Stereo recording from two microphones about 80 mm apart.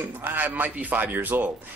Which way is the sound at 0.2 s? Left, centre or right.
Right.